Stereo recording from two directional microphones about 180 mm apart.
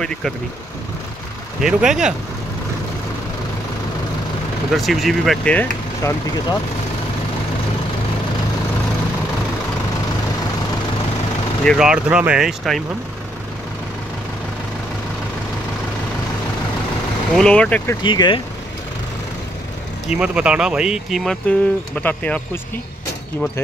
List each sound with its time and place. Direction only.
0.0 s speech: 5° left (ahead or behind)
1.6 s speech: 5° right (ahead or behind)
4.7 s speech: centre (ahead or behind)
11.6 s speech: centre (ahead or behind)
17.4 s speech: 5° left (ahead or behind)
18.0 s speech: 25° left (ahead or behind)
20.1 s speech: 5° right (ahead or behind)